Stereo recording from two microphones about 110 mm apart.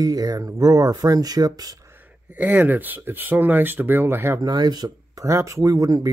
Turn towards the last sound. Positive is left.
turn(degrees=-30)  # may be behind; listen again after turning